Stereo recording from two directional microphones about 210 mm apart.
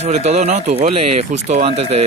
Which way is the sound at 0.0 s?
30° right (ahead or behind).